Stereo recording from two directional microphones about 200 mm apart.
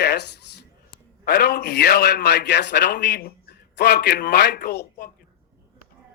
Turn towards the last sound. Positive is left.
turn(degrees=55)  # may be behind; listen again after turning